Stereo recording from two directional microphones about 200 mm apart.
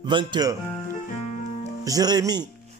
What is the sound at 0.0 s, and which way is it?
Speech, 25° right (ahead or behind).